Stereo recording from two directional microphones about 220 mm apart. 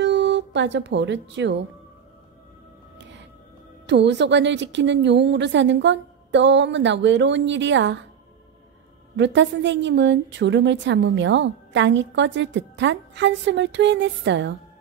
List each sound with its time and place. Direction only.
0.0 s speech: 55° right (ahead or behind)
3.0 s whale vocalization: 55° right (ahead or behind)
3.8 s a woman's voice: 50° right (ahead or behind)
9.1 s a woman's voice: 55° right (ahead or behind)